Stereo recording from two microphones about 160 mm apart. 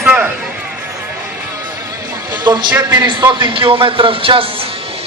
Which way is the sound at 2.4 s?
25° right (ahead or behind).